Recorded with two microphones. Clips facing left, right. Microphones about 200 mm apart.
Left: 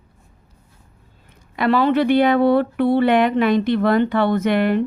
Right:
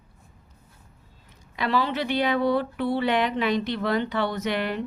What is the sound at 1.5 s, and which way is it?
Speech, 55° left (ahead or behind).